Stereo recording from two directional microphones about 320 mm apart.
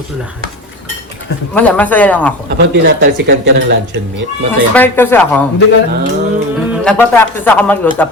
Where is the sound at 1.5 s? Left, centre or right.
Centre.